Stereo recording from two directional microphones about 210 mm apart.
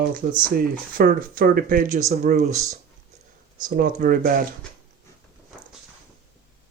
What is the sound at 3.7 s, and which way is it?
Speech, 45° right (ahead or behind).